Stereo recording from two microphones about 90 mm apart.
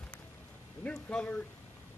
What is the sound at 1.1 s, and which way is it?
Speech, 10° left (ahead or behind).